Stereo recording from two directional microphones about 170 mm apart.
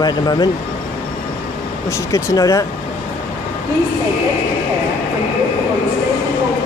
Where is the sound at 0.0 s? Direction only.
25° left (ahead or behind).